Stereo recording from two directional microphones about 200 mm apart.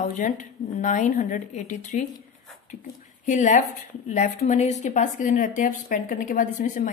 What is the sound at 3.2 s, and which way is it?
A woman's voice, 40° left (ahead or behind).